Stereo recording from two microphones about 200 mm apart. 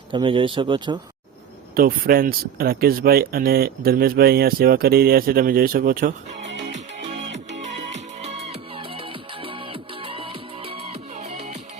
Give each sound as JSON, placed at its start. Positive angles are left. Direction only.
{"t": 0.1, "sound": "speech", "side_deg": -25}
{"t": 1.7, "sound": "speech", "side_deg": -45}
{"t": 6.4, "sound": "music", "side_deg": -60}
{"t": 6.7, "sound": "music", "side_deg": -35}